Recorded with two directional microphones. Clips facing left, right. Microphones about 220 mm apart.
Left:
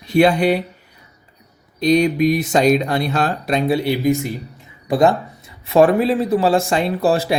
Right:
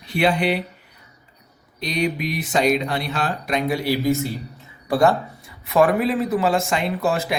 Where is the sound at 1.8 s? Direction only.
40° left (ahead or behind).